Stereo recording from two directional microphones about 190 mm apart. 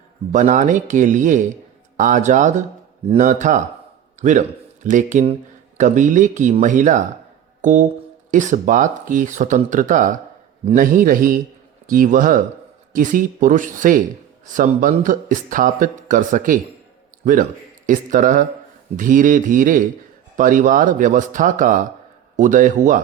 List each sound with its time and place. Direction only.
0.3 s a man's voice: 40° right (ahead or behind)
17.8 s speech: 45° right (ahead or behind)